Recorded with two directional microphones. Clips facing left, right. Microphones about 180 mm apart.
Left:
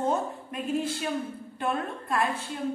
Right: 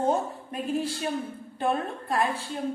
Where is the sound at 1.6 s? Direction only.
35° right (ahead or behind).